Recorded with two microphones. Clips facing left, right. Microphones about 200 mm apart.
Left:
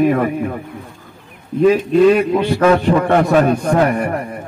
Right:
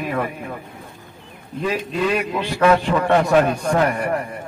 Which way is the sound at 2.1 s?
50° left (ahead or behind).